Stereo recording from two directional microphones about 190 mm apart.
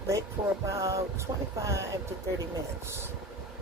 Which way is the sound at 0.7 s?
15° right (ahead or behind).